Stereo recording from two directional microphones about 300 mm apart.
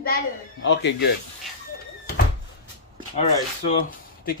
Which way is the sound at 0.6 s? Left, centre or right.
Left.